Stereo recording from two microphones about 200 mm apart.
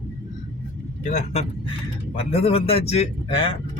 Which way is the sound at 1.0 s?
35° left (ahead or behind).